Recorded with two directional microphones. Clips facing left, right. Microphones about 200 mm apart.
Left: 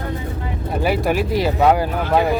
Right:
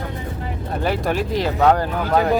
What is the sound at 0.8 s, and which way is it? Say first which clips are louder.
Speech: left 3 dB; 10° left (ahead or behind).